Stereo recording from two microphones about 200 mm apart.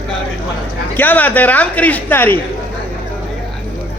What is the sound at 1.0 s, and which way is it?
Speech, 10° left (ahead or behind).